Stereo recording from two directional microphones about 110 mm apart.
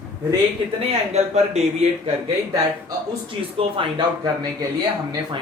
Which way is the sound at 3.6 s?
55° right (ahead or behind).